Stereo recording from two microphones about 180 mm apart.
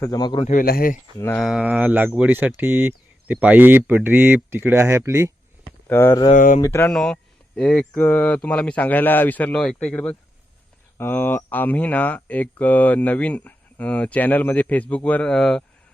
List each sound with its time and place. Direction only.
0.0 s speech: 20° left (ahead or behind)
0.4 s speech: 50° left (ahead or behind)
1.4 s speech: centre (ahead or behind)
5.9 s speech: 10° left (ahead or behind)
6.3 s speech: 45° left (ahead or behind)
6.6 s speech: 15° left (ahead or behind)
6.9 s speech: 5° left (ahead or behind)